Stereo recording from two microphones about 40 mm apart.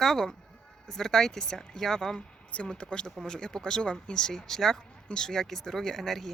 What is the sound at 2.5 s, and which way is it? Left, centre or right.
Speech, left.